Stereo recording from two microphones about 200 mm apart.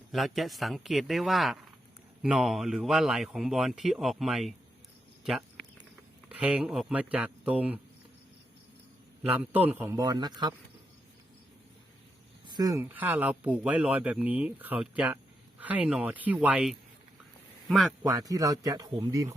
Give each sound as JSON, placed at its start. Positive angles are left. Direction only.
{"t": 0.1, "sound": "speech", "side_deg": 0}
{"t": 5.2, "sound": "a sound", "side_deg": 0}
{"t": 6.2, "sound": "speech", "side_deg": -5}
{"t": 9.2, "sound": "speech", "side_deg": -10}
{"t": 12.5, "sound": "speech", "side_deg": -20}
{"t": 18.0, "sound": "speech", "side_deg": -15}